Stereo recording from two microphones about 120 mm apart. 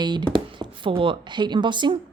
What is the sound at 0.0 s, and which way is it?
Speech, 35° right (ahead or behind).